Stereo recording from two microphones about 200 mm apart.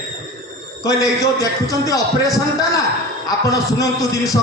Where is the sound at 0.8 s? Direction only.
15° left (ahead or behind).